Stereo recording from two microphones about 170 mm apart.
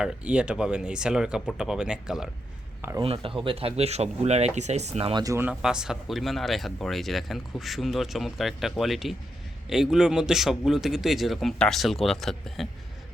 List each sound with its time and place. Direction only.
0.0 s speech: 5° right (ahead or behind)
3.0 s speech: 30° right (ahead or behind)
5.2 s speech: 20° right (ahead or behind)
5.5 s speech: 5° right (ahead or behind)